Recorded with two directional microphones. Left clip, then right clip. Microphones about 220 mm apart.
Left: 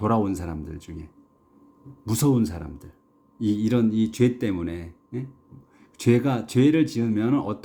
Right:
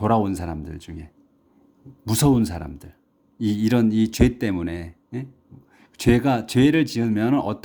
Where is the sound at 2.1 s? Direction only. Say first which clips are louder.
Right 3 dB; 30° right (ahead or behind).